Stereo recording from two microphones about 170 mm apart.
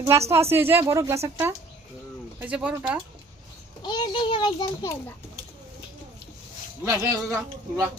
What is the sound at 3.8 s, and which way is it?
A child's voice, 25° left (ahead or behind).